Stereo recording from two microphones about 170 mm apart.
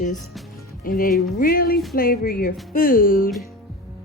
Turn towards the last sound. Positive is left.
turn(degrees=55)  # may be behind; listen again after turning